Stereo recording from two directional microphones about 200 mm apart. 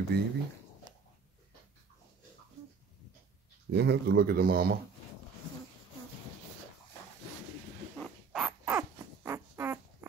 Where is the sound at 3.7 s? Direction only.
55° right (ahead or behind).